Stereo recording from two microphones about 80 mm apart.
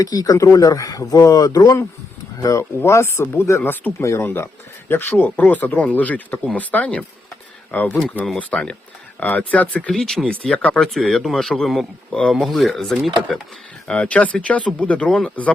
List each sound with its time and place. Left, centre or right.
0.0 s speech: left
3.6 s speech: left